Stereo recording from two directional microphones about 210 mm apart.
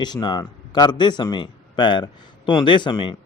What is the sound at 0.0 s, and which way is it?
A man's voice, 20° left (ahead or behind).